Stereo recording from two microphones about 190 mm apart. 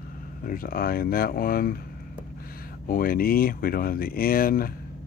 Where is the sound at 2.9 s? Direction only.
50° left (ahead or behind).